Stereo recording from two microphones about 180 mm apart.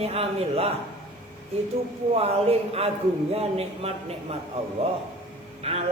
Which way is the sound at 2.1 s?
35° right (ahead or behind).